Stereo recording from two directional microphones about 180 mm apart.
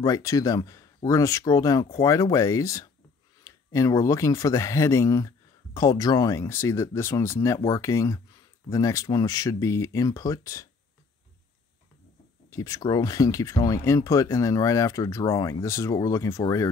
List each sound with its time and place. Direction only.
0.0 s speech: 20° left (ahead or behind)
12.4 s speech: 20° left (ahead or behind)